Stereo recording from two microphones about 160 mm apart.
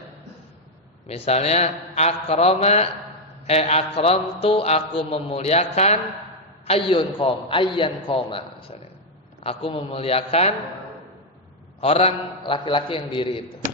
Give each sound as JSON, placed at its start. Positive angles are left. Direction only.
{"t": 1.0, "sound": "a man's voice", "side_deg": 40}
{"t": 11.8, "sound": "a man's voice", "side_deg": 40}